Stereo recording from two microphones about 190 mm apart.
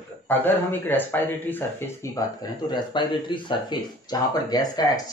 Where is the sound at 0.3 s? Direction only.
10° left (ahead or behind).